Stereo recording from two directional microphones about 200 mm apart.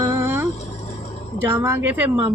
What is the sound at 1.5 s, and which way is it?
Speech, 10° right (ahead or behind).